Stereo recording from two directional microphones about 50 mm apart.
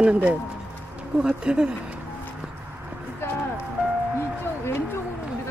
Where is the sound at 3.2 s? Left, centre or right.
Left.